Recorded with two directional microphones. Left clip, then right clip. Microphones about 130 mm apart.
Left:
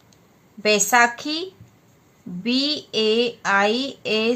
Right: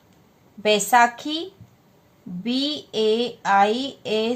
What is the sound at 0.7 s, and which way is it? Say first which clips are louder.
Speech: even; 35° left (ahead or behind).